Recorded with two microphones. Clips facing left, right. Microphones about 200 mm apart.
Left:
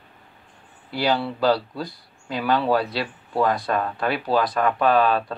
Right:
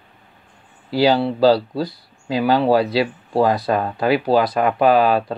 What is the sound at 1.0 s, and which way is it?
Speech, 25° right (ahead or behind).